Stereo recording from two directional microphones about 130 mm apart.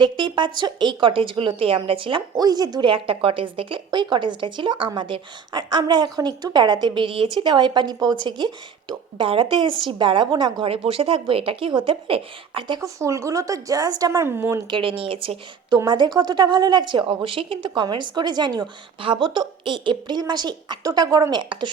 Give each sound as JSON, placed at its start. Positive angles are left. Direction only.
{"t": 0.0, "sound": "a woman's voice", "side_deg": -35}
{"t": 14.7, "sound": "a woman's voice", "side_deg": -40}
{"t": 15.8, "sound": "a woman's voice", "side_deg": -30}